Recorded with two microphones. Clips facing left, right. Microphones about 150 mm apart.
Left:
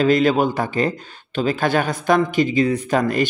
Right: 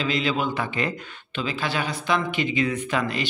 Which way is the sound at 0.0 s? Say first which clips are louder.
Left 9 dB; 45° left (ahead or behind).